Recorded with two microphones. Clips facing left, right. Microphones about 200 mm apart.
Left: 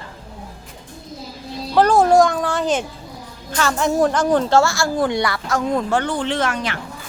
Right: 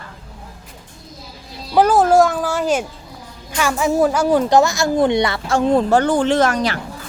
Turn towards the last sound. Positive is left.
turn(degrees=-40)  # may be behind; listen again after turning